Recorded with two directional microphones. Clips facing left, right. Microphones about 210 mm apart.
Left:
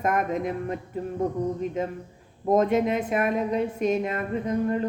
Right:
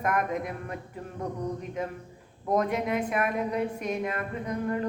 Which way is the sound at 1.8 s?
25° left (ahead or behind).